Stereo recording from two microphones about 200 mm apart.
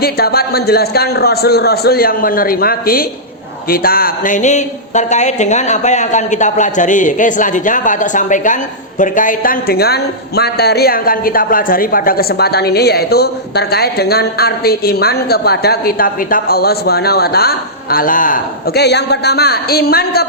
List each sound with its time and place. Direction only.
0.0 s a woman's voice: 50° left (ahead or behind)